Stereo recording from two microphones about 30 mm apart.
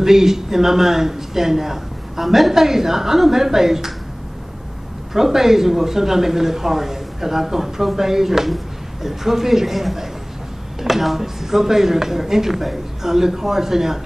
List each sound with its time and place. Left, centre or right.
0.0 s speech: centre
2.2 s a woman's voice: centre
2.5 s speech: centre
5.1 s speech: centre